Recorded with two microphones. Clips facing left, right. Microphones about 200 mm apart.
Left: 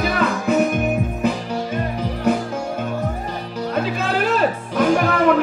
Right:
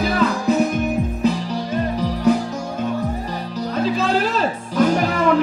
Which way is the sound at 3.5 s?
55° left (ahead or behind).